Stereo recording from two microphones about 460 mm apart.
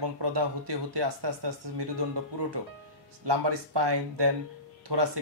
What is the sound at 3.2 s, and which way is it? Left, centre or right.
Speech, right.